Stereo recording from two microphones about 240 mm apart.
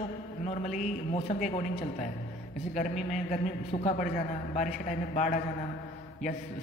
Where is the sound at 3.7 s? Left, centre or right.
Left.